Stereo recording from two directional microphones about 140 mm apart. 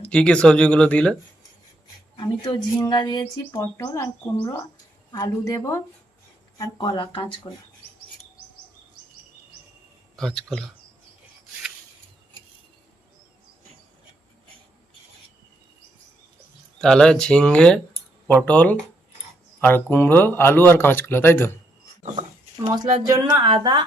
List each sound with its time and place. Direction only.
0.0 s speech: 10° left (ahead or behind)
2.1 s speech: 35° left (ahead or behind)
5.1 s speech: 20° left (ahead or behind)
6.6 s speech: 30° left (ahead or behind)
10.2 s speech: 5° left (ahead or behind)
16.7 s speech: 5° left (ahead or behind)
22.7 s speech: 30° right (ahead or behind)